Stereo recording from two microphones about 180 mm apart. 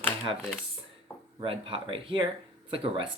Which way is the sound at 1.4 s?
30° right (ahead or behind).